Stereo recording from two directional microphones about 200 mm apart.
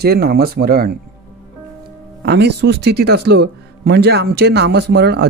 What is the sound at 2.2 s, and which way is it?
A man's voice, 60° right (ahead or behind).